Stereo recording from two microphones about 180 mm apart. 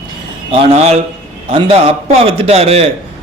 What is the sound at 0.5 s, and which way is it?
A man's voice, 35° right (ahead or behind).